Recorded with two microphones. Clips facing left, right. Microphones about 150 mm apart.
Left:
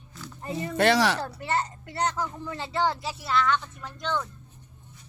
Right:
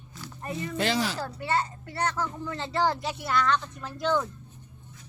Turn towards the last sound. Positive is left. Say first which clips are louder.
# right 4 dB
turn(degrees=-5)  # may be behind; listen again after turning